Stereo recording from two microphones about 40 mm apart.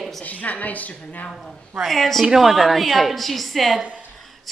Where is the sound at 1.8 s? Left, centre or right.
Centre.